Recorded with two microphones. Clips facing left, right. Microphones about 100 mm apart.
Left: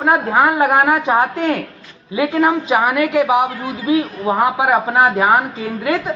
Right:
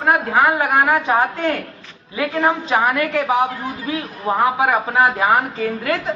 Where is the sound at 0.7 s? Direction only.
20° left (ahead or behind).